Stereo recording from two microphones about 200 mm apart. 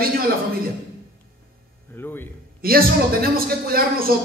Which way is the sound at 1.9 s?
10° left (ahead or behind).